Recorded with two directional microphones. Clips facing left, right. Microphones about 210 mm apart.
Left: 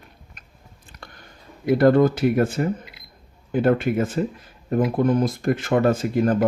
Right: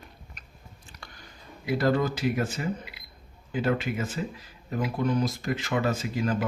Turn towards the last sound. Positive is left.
turn(degrees=55)  # may be behind; listen again after turning